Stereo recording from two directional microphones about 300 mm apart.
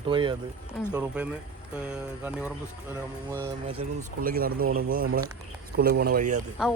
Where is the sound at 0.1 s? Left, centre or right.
Centre.